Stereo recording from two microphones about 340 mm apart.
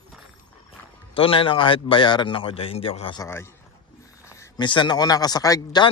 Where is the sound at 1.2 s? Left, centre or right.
Centre.